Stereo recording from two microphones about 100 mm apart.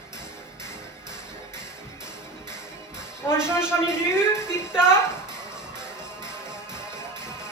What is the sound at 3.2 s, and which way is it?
A woman's voice, 25° left (ahead or behind).